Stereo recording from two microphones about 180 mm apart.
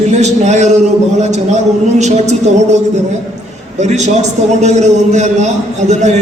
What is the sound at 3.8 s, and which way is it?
A man's voice, 40° right (ahead or behind).